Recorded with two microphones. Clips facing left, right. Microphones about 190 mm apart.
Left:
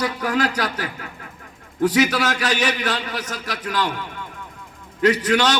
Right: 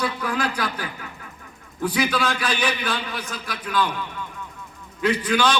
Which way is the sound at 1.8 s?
85° left.